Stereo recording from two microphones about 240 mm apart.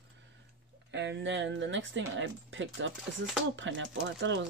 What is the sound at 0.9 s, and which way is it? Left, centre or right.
Speech, right.